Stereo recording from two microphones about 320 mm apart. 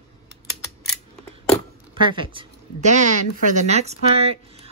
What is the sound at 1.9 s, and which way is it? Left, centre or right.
Speech, centre.